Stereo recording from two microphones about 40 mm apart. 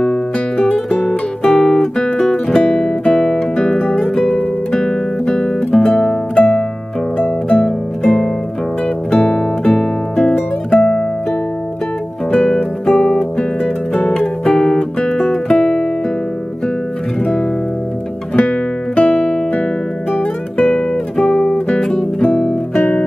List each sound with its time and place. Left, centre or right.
0.0 s music: centre
1.5 s guitar: centre
2.3 s guitar: left
3.5 s music: left
4.7 s guitar: left
5.8 s music: left
10.8 s music: centre
12.3 s music: left
12.8 s music: centre
13.4 s music: left
15.0 s music: left
15.2 s music: centre
18.5 s guitar: left
20.6 s guitar: centre